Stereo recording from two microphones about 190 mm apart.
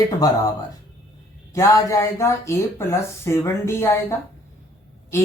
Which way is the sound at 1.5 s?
15° left (ahead or behind).